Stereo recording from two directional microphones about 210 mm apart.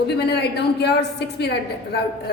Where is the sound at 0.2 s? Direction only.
50° left (ahead or behind).